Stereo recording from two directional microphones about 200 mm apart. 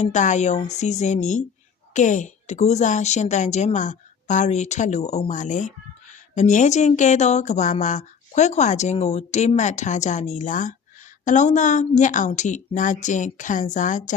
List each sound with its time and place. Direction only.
0.0 s speech: 35° left (ahead or behind)